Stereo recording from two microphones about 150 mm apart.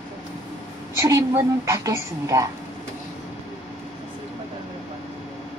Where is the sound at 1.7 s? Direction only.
20° right (ahead or behind).